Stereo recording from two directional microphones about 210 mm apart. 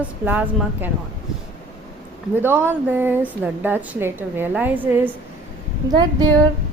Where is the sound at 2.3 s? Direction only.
10° right (ahead or behind).